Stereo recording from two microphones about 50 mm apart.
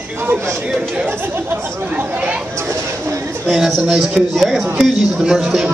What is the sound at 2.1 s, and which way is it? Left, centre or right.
Chatter, right.